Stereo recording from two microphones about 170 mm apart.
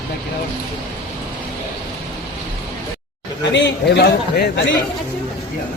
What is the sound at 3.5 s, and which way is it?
A man's voice, 85° left.